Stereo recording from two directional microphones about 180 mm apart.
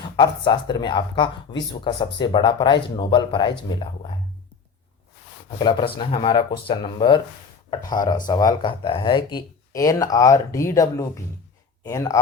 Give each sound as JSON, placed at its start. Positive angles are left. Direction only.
{"t": 0.2, "sound": "speech", "side_deg": 25}
{"t": 5.5, "sound": "speech", "side_deg": 25}